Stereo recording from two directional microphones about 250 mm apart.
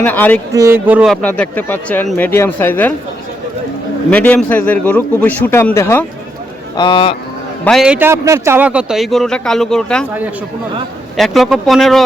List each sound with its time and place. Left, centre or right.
0.0 s speech: centre
0.5 s speech: centre
4.1 s a man's voice: centre; by 7.2 s left
7.6 s a man's voice: centre
11.2 s a man's voice: centre